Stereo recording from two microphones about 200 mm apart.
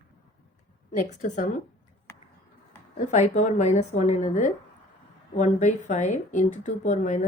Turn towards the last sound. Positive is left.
turn(degrees=35)  # may be behind; listen again after turning